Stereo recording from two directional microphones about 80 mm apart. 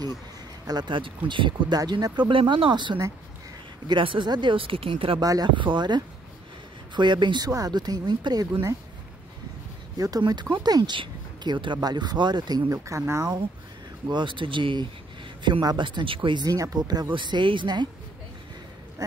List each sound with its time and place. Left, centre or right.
0.7 s speech: right
1.9 s speech: right
2.2 s speech: right
5.2 s speech: right
5.6 s speech: right
9.9 s speech: right
12.6 s speech: right
14.0 s speech: right
15.6 s speech: right
16.4 s speech: right
17.1 s speech: right